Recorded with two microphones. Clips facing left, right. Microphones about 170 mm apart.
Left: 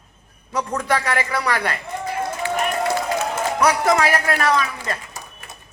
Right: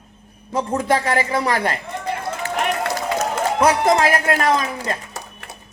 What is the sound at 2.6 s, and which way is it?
Run, 75° right (ahead or behind).